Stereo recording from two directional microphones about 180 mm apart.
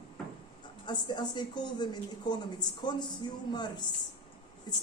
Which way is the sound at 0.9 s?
25° left (ahead or behind).